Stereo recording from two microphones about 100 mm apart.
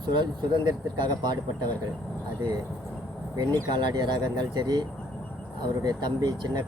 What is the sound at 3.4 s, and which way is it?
Speech, 45° right (ahead or behind).